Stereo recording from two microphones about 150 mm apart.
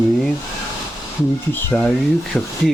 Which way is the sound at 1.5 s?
15° left (ahead or behind).